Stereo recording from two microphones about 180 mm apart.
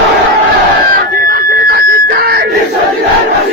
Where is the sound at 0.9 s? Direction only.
55° right (ahead or behind).